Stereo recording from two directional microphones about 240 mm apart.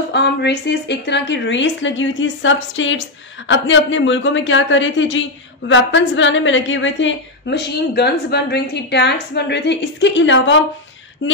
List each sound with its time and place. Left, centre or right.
0.1 s speech: left